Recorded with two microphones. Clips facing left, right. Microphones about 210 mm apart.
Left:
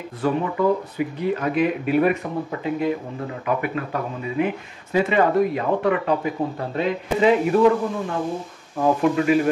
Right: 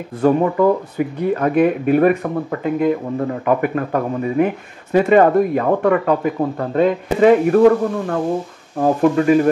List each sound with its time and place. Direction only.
0.2 s speech: 50° right (ahead or behind)